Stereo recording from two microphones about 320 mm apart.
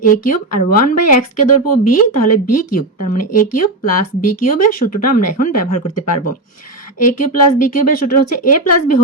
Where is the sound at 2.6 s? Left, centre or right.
Left.